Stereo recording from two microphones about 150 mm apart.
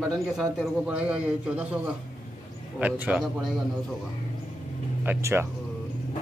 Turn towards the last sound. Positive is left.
turn(degrees=-15)  # may be behind; listen again after turning